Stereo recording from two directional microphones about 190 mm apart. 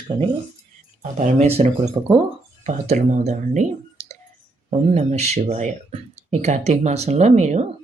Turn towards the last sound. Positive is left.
turn(degrees=-35)  # may be behind; listen again after turning